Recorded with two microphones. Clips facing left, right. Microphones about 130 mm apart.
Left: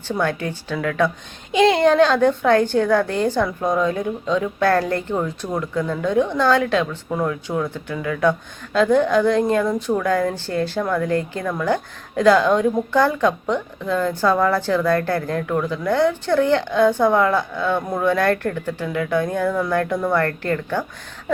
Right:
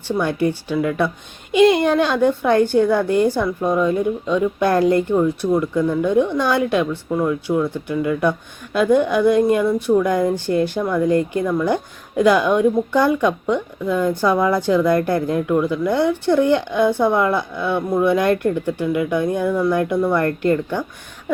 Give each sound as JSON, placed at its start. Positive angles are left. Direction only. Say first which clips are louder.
{"t": 0.1, "sound": "speech", "louder": "right 3 dB", "side_deg": -15}